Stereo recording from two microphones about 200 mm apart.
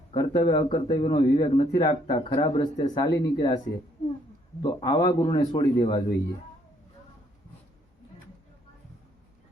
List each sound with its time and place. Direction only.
0.1 s speech: 20° left (ahead or behind)
4.6 s speech: 20° left (ahead or behind)